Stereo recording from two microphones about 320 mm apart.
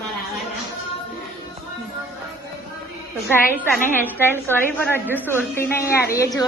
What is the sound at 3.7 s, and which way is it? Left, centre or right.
A woman's voice, centre.